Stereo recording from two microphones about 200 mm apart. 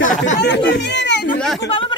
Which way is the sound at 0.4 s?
60° left (ahead or behind).